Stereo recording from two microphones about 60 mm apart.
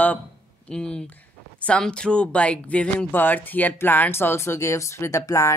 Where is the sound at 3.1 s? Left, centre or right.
Left.